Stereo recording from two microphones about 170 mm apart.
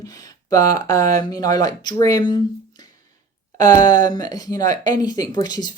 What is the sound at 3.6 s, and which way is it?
Speech, 20° left (ahead or behind).